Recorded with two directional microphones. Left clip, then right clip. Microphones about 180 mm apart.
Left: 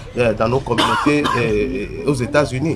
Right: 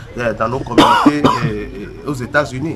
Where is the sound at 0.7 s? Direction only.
55° right (ahead or behind).